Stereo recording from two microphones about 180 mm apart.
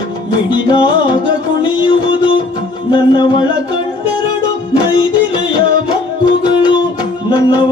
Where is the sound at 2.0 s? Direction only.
25° left (ahead or behind).